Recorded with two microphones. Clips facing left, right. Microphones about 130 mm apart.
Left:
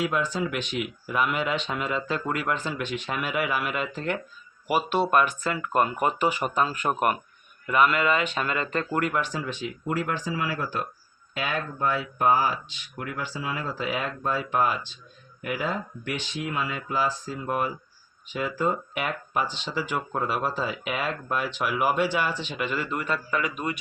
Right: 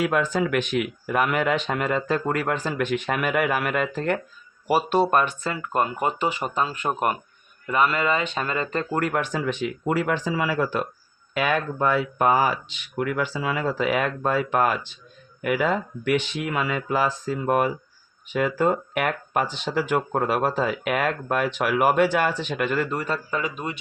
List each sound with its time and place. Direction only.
0.0 s speech: 65° right (ahead or behind)
13.0 s speech: 80° right; by 14.8 s 60° right (ahead or behind)
15.4 s speech: 70° right (ahead or behind); by 23.7 s 30° right (ahead or behind)